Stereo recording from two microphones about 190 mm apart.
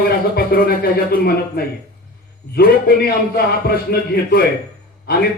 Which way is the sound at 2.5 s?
55° left (ahead or behind).